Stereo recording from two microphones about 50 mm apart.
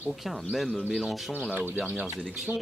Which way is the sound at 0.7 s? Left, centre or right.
Centre.